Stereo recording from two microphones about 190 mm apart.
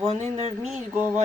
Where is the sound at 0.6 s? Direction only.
5° right (ahead or behind).